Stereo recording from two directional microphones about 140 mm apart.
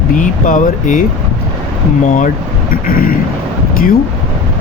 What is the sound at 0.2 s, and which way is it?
Speech, 65° left (ahead or behind).